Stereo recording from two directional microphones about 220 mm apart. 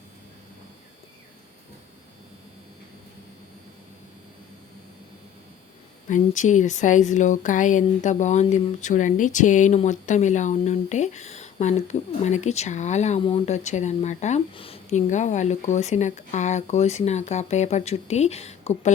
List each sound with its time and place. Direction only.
6.1 s speech: 35° left (ahead or behind)